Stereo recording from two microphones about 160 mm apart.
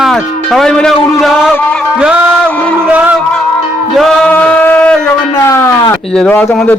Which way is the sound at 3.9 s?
Centre (ahead or behind).